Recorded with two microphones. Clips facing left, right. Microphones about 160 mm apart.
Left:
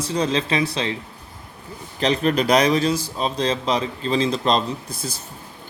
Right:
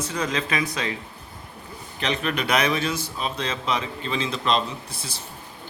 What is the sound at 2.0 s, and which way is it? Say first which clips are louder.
A man's voice: left 7 dB; 35° left (ahead or behind).